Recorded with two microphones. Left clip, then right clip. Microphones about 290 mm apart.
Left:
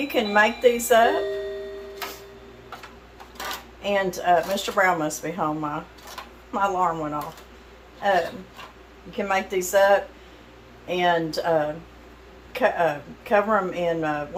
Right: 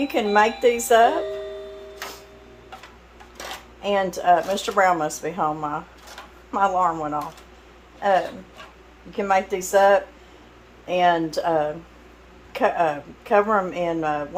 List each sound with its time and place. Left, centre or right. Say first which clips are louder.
0.1 s speech: even; right
3.8 s speech: right 2 dB; right
9.1 s speech: right 3 dB; right